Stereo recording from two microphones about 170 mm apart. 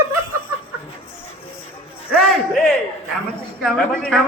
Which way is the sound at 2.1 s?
Centre (ahead or behind).